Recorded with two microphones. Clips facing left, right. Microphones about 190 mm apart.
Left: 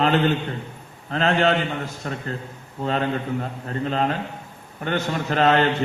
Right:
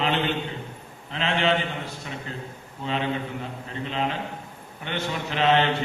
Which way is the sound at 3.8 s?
45° left (ahead or behind).